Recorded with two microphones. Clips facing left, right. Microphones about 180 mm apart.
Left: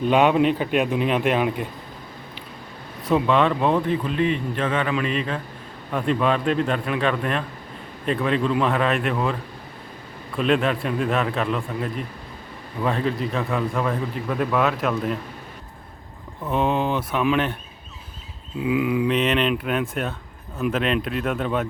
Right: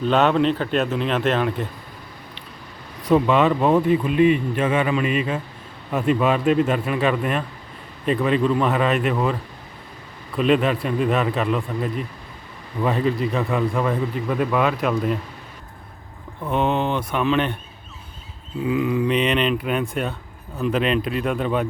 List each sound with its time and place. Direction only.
0.1 s speech: 10° left (ahead or behind)
3.0 s a man's voice: centre (ahead or behind)
16.5 s a man's voice: 5° left (ahead or behind)
18.6 s a man's voice: 10° left (ahead or behind)